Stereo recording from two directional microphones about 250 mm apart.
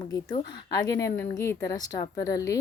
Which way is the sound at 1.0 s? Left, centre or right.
Centre.